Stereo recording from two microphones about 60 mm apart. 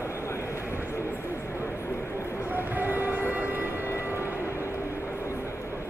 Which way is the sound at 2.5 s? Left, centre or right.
Right.